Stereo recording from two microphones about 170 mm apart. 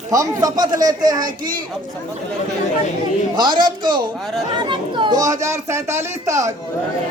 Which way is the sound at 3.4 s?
25° right (ahead or behind).